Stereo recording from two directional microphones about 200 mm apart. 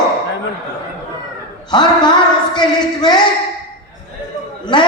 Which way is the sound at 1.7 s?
20° left (ahead or behind).